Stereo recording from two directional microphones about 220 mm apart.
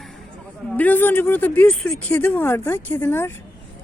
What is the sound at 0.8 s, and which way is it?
Speech, 10° left (ahead or behind).